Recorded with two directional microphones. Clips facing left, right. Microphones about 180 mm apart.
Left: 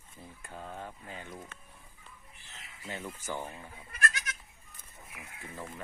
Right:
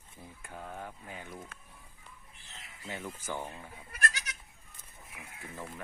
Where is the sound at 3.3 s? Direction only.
Centre (ahead or behind).